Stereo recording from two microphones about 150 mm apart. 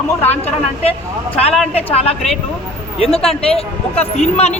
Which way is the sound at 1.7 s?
40° left (ahead or behind).